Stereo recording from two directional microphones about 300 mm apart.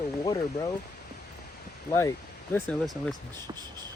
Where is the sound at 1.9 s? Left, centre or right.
Centre.